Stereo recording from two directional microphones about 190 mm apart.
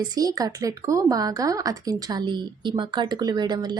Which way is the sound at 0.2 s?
20° right (ahead or behind).